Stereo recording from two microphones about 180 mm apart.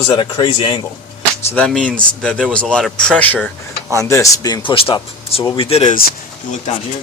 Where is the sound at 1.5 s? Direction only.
5° left (ahead or behind); by 5.9 s 30° left (ahead or behind).